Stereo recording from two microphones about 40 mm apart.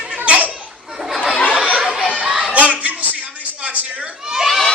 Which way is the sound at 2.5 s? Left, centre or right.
Right.